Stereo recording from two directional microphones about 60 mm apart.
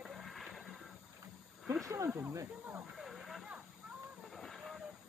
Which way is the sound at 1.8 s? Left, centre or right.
Right.